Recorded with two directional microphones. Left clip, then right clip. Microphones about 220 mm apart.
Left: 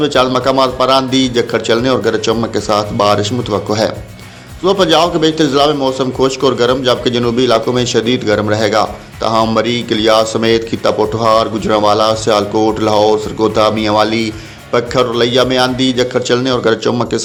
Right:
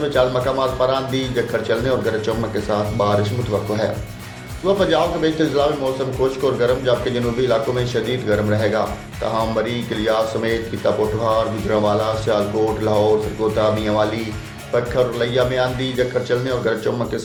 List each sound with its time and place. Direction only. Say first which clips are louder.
0.1 s speech: left 6 dB; 40° left (ahead or behind)
4.6 s speech: left 7 dB; 40° left (ahead or behind)